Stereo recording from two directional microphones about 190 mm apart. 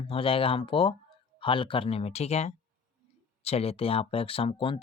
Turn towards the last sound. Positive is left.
turn(degrees=30)  # may be behind; listen again after turning